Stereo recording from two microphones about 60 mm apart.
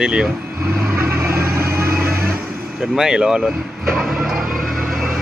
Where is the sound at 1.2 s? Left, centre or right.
Right.